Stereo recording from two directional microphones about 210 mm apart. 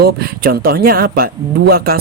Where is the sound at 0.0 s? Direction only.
50° right (ahead or behind).